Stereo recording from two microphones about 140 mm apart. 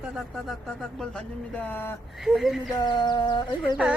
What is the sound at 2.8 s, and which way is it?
Speech, 30° left (ahead or behind).